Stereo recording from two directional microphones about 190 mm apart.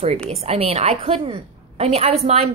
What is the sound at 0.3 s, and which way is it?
A woman's voice, 30° right (ahead or behind).